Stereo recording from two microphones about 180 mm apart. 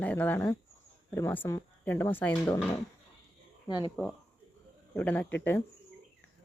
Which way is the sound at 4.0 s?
5° left (ahead or behind).